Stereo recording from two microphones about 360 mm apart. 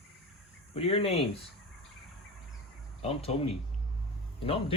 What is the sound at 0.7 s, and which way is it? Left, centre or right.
Speech, centre.